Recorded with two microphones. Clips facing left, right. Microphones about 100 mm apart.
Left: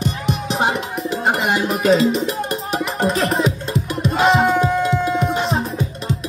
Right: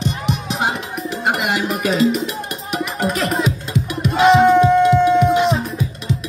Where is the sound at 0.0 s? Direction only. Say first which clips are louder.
Even; 40° left (ahead or behind).